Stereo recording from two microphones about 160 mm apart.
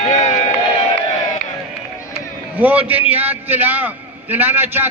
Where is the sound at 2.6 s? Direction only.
10° right (ahead or behind).